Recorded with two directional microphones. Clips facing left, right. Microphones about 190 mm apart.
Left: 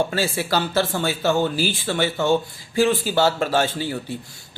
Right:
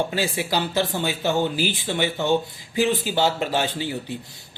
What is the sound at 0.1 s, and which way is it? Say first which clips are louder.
Speech: left 2 dB; 15° right (ahead or behind).